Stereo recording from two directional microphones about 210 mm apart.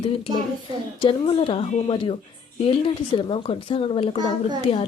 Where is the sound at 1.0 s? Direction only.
25° left (ahead or behind).